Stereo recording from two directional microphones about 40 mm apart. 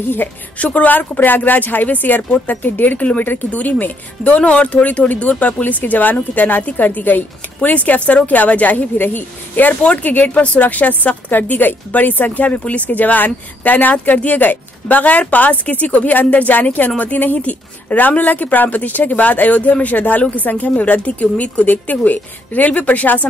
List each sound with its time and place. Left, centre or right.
0.6 s a woman's voice: left
7.7 s a woman's voice: left